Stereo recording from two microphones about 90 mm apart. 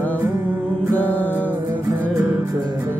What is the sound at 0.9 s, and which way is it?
Music, 20° left (ahead or behind).